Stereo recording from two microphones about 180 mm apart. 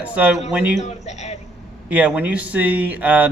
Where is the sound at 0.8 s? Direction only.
40° left (ahead or behind).